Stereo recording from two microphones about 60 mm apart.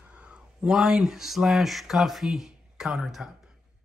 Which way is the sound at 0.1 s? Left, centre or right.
Right.